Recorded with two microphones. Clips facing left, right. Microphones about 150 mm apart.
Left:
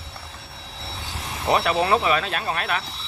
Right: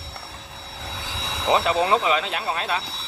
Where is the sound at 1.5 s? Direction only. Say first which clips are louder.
Even; 20° right (ahead or behind).